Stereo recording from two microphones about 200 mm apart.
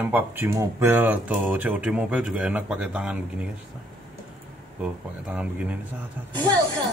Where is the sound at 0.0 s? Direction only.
10° right (ahead or behind).